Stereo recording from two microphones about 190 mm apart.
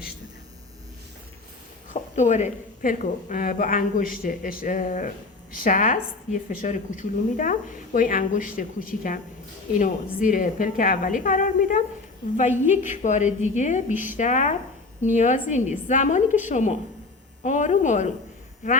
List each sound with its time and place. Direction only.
1.9 s a woman's voice: 40° left (ahead or behind)
13.9 s a woman's voice: 10° right (ahead or behind)
14.2 s a woman's voice: 40° left (ahead or behind)